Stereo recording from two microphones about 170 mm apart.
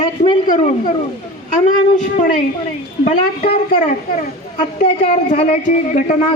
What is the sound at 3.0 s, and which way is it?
A man's voice, 35° left (ahead or behind).